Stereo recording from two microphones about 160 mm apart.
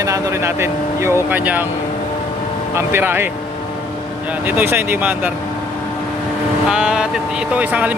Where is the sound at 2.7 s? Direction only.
15° right (ahead or behind).